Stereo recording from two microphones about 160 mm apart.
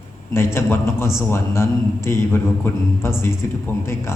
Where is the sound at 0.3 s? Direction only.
15° left (ahead or behind).